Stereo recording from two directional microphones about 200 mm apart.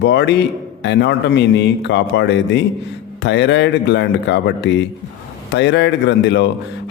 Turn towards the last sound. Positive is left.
turn(degrees=60)  # may be behind; listen again after turning